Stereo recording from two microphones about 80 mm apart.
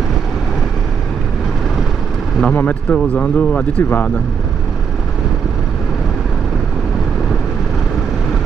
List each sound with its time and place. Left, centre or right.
2.5 s speech: centre